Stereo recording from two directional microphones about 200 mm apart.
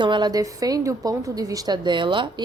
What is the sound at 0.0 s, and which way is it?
A woman's voice, 20° right (ahead or behind).